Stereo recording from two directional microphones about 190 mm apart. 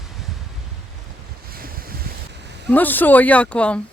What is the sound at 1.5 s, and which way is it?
Boat, 50° right (ahead or behind).